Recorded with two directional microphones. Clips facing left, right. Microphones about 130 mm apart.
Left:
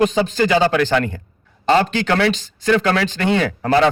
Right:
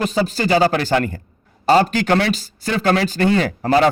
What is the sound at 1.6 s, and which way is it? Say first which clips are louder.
Speech: right 1 dB; 10° right (ahead or behind).